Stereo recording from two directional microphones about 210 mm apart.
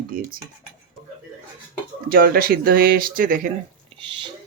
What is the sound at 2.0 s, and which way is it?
Speech, 45° right (ahead or behind).